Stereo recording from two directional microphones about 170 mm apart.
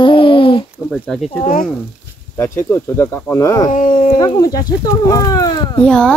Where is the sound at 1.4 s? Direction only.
50° left (ahead or behind).